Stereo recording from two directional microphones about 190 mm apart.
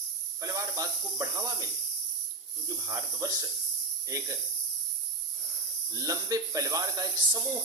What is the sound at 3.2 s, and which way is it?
Speech, 15° right (ahead or behind).